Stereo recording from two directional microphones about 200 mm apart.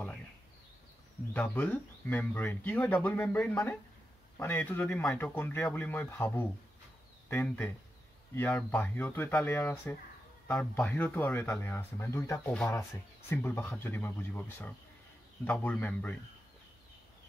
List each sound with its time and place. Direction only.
1.3 s speech: 10° left (ahead or behind)